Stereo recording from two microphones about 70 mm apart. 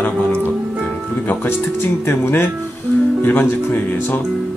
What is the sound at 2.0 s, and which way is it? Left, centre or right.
A man's voice, left.